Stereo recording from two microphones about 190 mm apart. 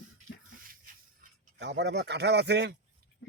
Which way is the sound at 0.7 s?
45° right (ahead or behind).